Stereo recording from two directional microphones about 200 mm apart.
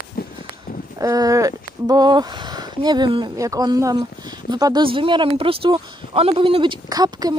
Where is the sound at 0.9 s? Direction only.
15° right (ahead or behind).